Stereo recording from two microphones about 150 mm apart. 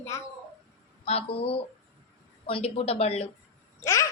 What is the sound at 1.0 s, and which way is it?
Speech, 40° left (ahead or behind).